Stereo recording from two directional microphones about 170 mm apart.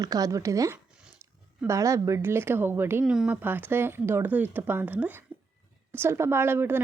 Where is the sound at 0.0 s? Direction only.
20° right (ahead or behind).